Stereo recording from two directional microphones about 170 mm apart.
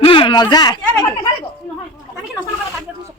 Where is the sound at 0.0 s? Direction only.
30° left (ahead or behind).